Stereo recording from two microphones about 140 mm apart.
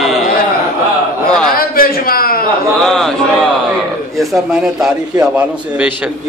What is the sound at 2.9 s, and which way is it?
A man's voice, centre (ahead or behind).